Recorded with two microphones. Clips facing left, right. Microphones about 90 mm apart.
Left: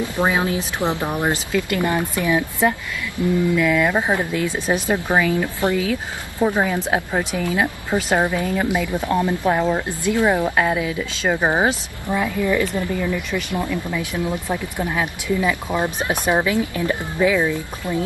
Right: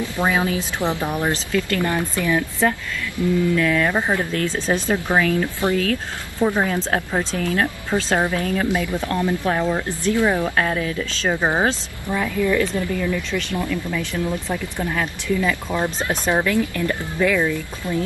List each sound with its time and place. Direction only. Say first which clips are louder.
0.0 s speech: left 1 dB; 20° left (ahead or behind)